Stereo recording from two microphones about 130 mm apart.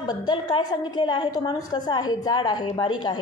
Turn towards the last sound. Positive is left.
turn(degrees=35)  # may be behind; listen again after turning